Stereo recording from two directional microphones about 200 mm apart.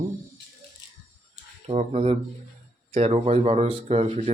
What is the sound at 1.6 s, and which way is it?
Speech, 35° right (ahead or behind).